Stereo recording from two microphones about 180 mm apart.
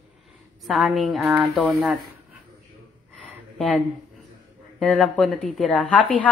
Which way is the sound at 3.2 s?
Centre (ahead or behind).